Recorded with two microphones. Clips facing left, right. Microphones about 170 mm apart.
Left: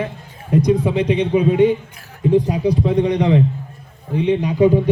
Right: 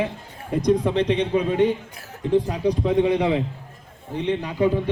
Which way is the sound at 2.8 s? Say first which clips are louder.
Left 1 dB; 5° right (ahead or behind).